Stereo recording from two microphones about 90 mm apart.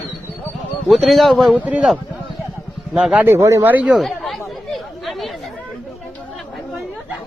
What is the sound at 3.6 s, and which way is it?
Speech, 15° right (ahead or behind).